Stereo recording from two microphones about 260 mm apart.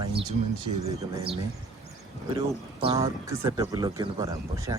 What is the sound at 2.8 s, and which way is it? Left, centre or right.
Speech, right.